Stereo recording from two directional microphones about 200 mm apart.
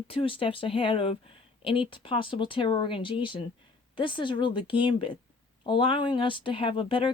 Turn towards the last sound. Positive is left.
turn(degrees=25)  # may be behind; listen again after turning